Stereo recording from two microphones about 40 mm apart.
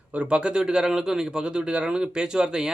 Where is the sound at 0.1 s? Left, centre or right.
Right.